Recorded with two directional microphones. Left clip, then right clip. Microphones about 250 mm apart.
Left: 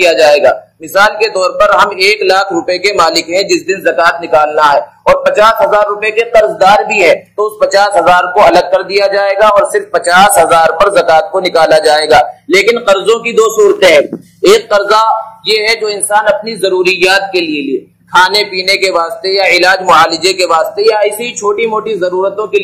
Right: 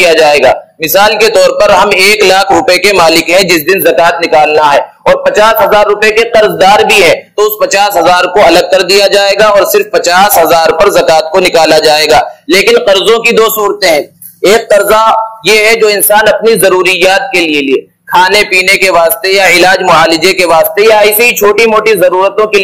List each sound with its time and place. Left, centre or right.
0.0 s a man's voice: right